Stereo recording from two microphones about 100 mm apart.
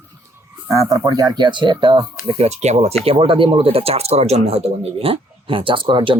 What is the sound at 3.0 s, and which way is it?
Speech, 70° right (ahead or behind).